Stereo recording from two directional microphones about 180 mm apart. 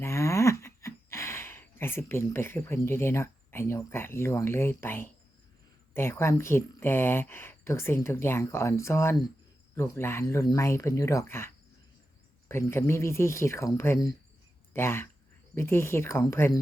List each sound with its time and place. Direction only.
0.0 s speech: 15° left (ahead or behind)